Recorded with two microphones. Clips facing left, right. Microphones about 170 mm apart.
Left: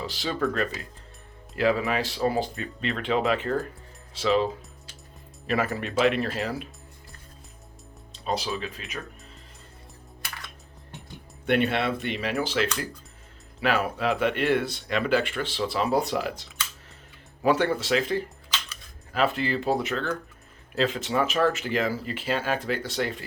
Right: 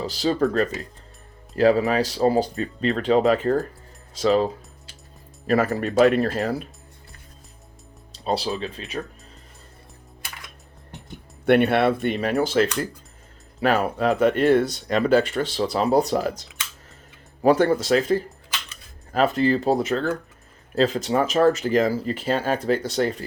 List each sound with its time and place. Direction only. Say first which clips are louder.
0.0 s speech: right 6 dB; 40° right (ahead or behind)
5.5 s speech: right 6 dB; 40° right (ahead or behind)
8.1 s speech: right 4 dB; 35° right (ahead or behind)
11.4 s speech: right 7 dB; 60° right (ahead or behind); by 23.1 s 40° right (ahead or behind)